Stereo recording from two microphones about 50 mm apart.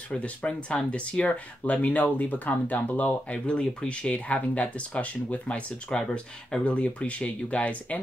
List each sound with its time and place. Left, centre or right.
0.1 s speech: left
3.3 s speech: left
5.9 s speech: centre
6.6 s speech: left